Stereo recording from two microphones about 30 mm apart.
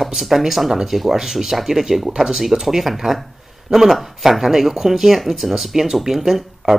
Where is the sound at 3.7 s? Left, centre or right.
Right.